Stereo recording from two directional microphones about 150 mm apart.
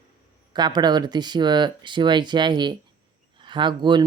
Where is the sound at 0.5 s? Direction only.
30° right (ahead or behind).